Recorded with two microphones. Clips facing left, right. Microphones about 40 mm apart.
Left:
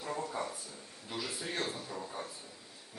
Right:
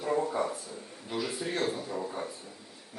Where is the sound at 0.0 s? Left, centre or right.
Right.